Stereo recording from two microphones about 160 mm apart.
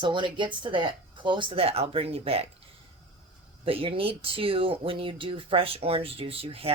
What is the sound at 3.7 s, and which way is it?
Speech, 35° right (ahead or behind).